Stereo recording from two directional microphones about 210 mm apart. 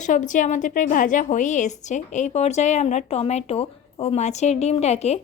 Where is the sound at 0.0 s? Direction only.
35° left (ahead or behind).